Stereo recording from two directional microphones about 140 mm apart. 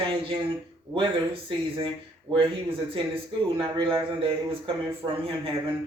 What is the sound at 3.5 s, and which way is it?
A man's voice, 40° right (ahead or behind).